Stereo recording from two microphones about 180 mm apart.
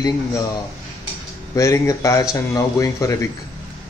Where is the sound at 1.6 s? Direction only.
15° left (ahead or behind).